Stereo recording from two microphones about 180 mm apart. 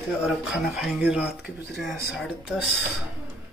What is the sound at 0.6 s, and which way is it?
Speech, centre (ahead or behind).